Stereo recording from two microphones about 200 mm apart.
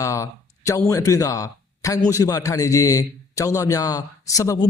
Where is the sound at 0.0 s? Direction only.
15° left (ahead or behind).